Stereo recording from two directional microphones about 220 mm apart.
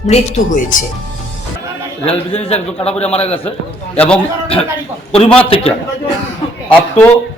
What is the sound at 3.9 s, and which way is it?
Speech, 5° left (ahead or behind).